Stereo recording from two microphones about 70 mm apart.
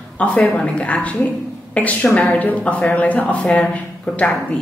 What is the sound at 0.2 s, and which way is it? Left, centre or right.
Speech, left.